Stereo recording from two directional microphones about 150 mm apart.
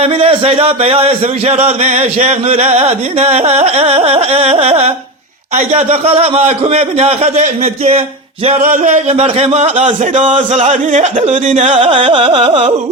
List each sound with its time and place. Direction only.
0.0 s speech: 40° right (ahead or behind)
11.7 s carnatic music: 35° right (ahead or behind)